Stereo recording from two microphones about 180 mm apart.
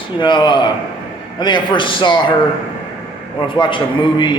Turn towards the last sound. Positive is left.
turn(degrees=25)  # may be behind; listen again after turning